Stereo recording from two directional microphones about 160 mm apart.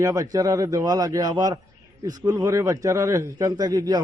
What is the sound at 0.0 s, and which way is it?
A man's voice, 20° right (ahead or behind).